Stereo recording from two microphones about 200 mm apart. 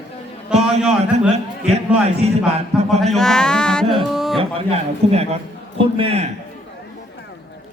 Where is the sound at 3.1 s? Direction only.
5° left (ahead or behind).